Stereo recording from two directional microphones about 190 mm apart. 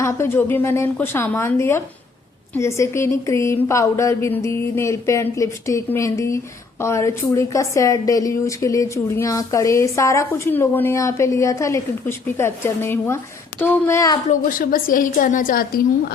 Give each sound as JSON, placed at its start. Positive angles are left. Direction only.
{"t": 0.0, "sound": "a woman's voice", "side_deg": 10}
{"t": 14.3, "sound": "a woman's voice", "side_deg": 45}